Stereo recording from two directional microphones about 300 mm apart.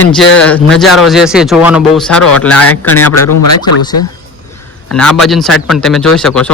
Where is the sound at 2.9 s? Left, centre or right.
Left.